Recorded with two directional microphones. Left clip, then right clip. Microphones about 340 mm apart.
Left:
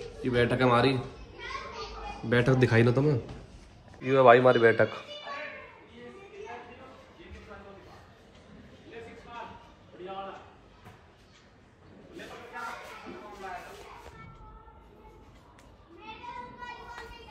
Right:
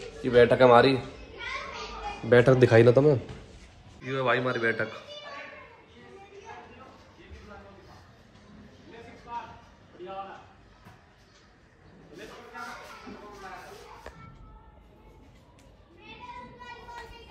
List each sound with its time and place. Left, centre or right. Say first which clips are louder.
0.2 s a man's voice: right 7 dB; centre
2.2 s a man's voice: right 6 dB; centre
16.0 s children playing: left 2 dB; centre